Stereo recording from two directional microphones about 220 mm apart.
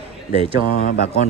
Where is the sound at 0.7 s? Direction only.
45° left (ahead or behind).